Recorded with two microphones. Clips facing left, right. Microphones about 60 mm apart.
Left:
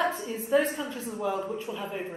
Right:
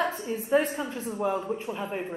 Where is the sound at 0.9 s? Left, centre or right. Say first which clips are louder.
Right 2 dB; centre.